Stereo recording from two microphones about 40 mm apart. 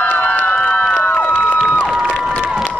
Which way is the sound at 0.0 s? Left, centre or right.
Left.